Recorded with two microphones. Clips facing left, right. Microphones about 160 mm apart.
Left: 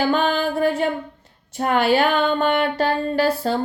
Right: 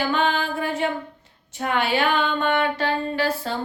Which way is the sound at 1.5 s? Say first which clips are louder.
Left 5 dB; 40° left (ahead or behind).